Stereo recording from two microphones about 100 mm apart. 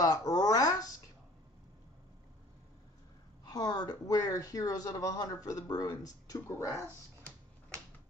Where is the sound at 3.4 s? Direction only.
40° left (ahead or behind).